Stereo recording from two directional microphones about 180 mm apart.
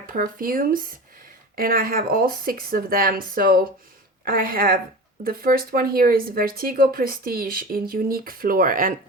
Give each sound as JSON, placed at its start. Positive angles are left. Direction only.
{"t": 0.1, "sound": "speech", "side_deg": -50}